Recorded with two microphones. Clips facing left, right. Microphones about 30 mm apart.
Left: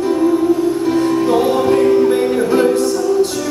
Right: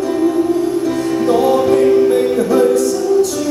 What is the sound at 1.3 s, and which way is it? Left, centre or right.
Music, left.